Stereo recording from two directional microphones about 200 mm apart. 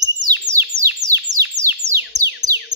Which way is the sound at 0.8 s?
15° right (ahead or behind).